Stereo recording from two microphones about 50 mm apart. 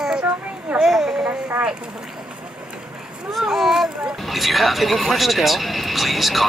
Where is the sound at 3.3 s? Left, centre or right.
Centre.